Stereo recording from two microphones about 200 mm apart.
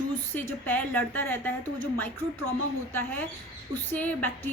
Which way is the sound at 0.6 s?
10° left (ahead or behind).